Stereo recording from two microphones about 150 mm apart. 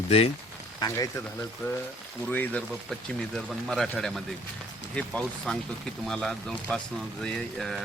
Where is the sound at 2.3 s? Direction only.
10° left (ahead or behind).